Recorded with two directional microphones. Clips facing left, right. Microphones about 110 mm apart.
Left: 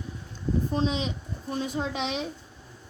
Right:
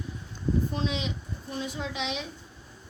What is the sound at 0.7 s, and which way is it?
A woman's voice, 35° left (ahead or behind).